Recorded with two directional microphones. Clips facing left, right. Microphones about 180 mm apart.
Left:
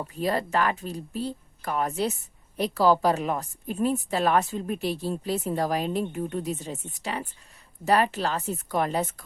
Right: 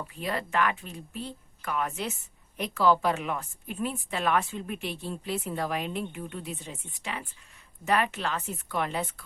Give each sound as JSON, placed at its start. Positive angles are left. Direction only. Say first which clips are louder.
{"t": 0.1, "sound": "a woman's voice", "louder": "left 6 dB", "side_deg": 40}